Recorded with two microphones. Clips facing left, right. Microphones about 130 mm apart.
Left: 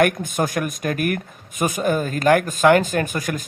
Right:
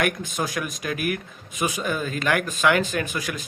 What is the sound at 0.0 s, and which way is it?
Speech, 50° left (ahead or behind).